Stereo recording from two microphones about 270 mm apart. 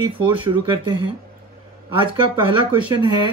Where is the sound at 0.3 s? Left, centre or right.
Centre.